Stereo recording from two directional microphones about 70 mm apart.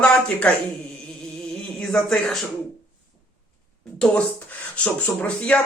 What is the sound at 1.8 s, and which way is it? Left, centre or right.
Speech, centre.